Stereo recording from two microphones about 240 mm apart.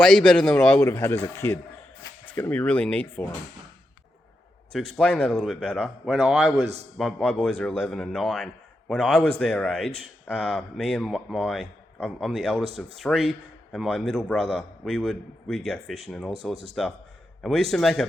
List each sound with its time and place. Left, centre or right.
0.0 s speech: centre
4.7 s speech: centre